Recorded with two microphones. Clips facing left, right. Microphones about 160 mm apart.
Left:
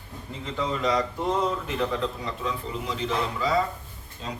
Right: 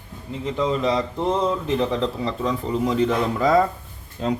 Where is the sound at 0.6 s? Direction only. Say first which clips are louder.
Right 4 dB; 25° right (ahead or behind).